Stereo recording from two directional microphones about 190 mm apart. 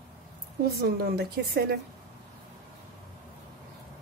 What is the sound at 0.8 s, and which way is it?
A woman's voice, 55° right (ahead or behind).